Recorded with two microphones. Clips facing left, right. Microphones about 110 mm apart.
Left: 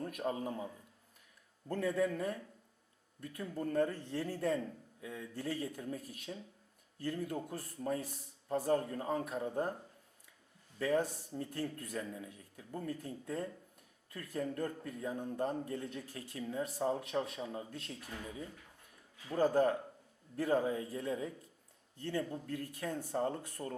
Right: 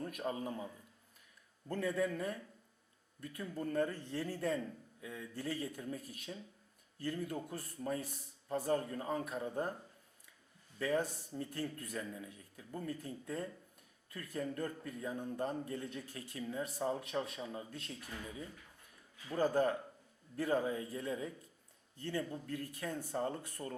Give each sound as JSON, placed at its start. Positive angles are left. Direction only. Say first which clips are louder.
{"t": 0.1, "sound": "a man's voice", "louder": "left 2 dB", "side_deg": 55}
{"t": 1.7, "sound": "a man's voice", "louder": "left 2 dB", "side_deg": 50}
{"t": 10.8, "sound": "a man's voice", "louder": "left 2 dB", "side_deg": 50}
{"t": 11.3, "sound": "a man's voice", "louder": "left 1 dB", "side_deg": 50}
{"t": 23.0, "sound": "a man's voice", "louder": "left 3 dB", "side_deg": 40}